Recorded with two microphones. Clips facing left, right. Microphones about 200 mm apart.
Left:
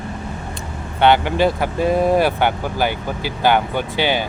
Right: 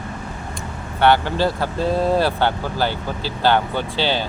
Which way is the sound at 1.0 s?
20° left (ahead or behind).